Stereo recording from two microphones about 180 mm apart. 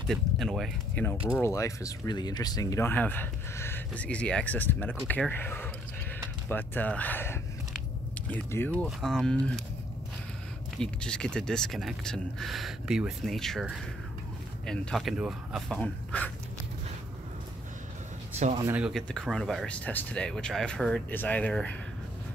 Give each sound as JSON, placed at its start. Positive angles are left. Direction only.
{"t": 0.1, "sound": "speech", "side_deg": 0}
{"t": 1.4, "sound": "speech", "side_deg": 15}
{"t": 10.8, "sound": "speech", "side_deg": 5}
{"t": 18.3, "sound": "a sound", "side_deg": -40}
{"t": 18.7, "sound": "speech", "side_deg": -5}